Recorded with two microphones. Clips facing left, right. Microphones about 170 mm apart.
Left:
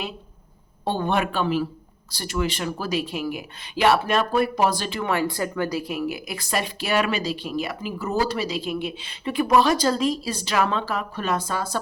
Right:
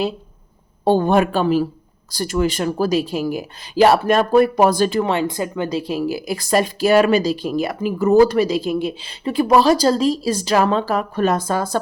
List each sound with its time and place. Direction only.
0.9 s speech: 40° right (ahead or behind)
5.0 s speech: 20° right (ahead or behind); by 11.8 s 45° right (ahead or behind)